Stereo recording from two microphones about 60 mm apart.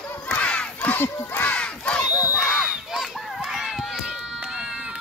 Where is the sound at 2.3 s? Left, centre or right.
Centre.